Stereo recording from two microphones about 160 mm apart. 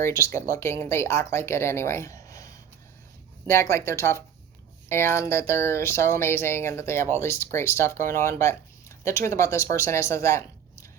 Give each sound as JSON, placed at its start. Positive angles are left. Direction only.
{"t": 0.0, "sound": "a woman's voice", "side_deg": 20}